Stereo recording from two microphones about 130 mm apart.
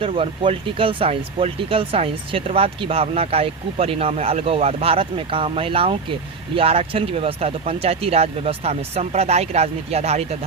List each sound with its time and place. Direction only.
0.0 s speech: 40° right (ahead or behind)